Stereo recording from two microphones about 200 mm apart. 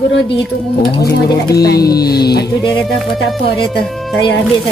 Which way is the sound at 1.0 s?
50° left (ahead or behind).